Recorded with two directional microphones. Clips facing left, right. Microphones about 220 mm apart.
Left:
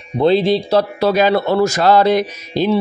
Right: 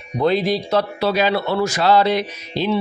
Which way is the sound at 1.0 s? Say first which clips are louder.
Left 5 dB; 45° left (ahead or behind).